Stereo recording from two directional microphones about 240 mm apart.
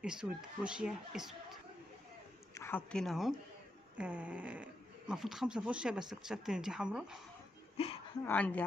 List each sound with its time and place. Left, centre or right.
0.0 s speech: centre
2.5 s speech: centre
7.7 s a sound: left
8.3 s speech: centre